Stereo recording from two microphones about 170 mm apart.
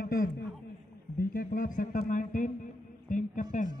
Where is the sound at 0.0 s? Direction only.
60° left (ahead or behind).